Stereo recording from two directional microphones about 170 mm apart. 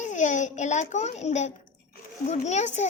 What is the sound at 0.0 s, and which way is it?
A child's voice, 45° left (ahead or behind).